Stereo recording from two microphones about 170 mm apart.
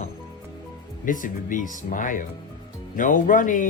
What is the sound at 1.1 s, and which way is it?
Speech, 50° left (ahead or behind).